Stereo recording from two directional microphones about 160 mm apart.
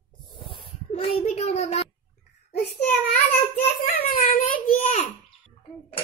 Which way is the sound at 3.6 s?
70° left (ahead or behind).